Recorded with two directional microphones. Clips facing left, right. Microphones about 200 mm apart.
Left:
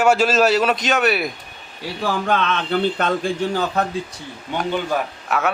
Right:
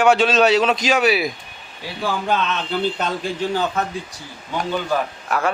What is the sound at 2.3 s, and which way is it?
Speech, 55° left (ahead or behind).